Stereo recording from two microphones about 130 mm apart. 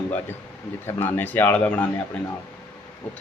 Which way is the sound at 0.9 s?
15° left (ahead or behind).